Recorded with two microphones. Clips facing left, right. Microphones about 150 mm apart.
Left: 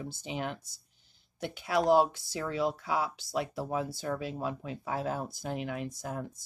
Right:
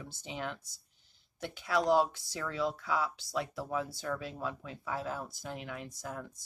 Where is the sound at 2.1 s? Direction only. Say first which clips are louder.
Left 4 dB; 25° left (ahead or behind).